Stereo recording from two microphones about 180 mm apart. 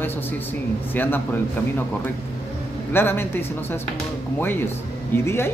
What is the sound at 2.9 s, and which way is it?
Speech, 10° left (ahead or behind).